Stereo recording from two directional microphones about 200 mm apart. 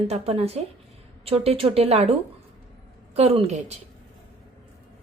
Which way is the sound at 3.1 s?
30° right (ahead or behind).